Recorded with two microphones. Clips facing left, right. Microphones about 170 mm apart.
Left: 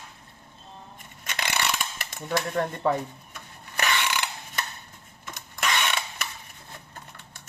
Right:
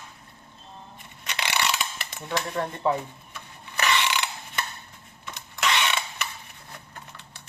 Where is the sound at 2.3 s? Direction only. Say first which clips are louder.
Left 2 dB; 45° left (ahead or behind).